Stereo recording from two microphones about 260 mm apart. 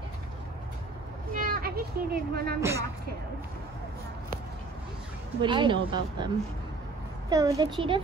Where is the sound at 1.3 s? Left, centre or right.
Right.